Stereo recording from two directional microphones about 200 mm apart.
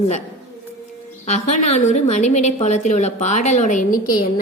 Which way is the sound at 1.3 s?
35° left (ahead or behind).